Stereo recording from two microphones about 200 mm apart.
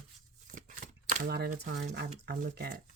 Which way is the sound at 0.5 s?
40° right (ahead or behind).